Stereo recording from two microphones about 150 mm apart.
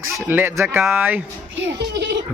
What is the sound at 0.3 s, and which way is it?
Speech, 15° right (ahead or behind).